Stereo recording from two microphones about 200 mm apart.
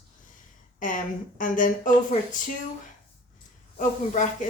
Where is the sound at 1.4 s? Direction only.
40° left (ahead or behind).